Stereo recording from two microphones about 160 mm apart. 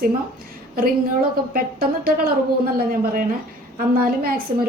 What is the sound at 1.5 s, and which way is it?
A woman's voice, 65° right (ahead or behind).